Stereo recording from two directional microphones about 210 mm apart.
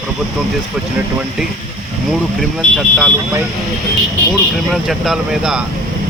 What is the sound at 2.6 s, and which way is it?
Speech, centre (ahead or behind).